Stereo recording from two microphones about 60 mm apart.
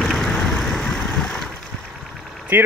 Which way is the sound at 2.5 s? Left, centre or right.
Right.